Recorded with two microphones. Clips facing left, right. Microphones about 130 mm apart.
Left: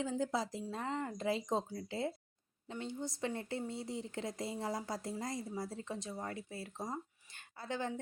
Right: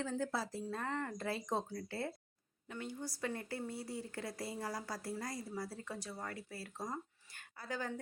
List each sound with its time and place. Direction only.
0.0 s speech: 15° left (ahead or behind)